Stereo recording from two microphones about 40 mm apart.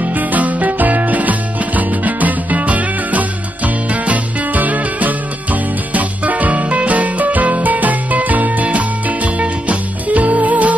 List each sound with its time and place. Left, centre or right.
0.0 s music: right